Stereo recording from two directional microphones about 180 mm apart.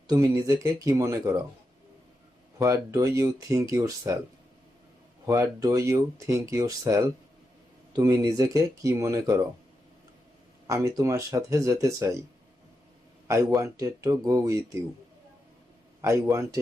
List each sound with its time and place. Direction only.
0.1 s speech: 20° right (ahead or behind)
2.6 s speech: 15° right (ahead or behind)
5.2 s speech: 15° right (ahead or behind)
10.7 s speech: 20° right (ahead or behind)
13.2 s speech: 20° right (ahead or behind)
16.0 s speech: 15° right (ahead or behind)